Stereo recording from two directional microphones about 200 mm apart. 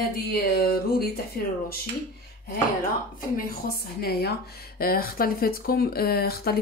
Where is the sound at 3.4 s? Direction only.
50° left (ahead or behind).